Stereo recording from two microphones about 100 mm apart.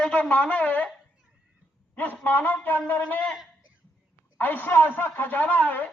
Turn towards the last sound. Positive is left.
turn(degrees=15)  # may be behind; listen again after turning